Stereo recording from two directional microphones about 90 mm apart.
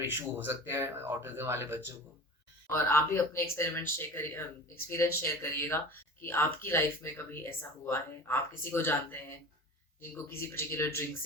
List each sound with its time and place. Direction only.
0.1 s speech: 25° right (ahead or behind)
2.6 s speech: 25° left (ahead or behind)
10.0 s speech: 30° left (ahead or behind)